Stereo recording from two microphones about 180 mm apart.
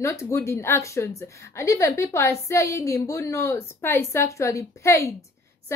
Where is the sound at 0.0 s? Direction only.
15° left (ahead or behind).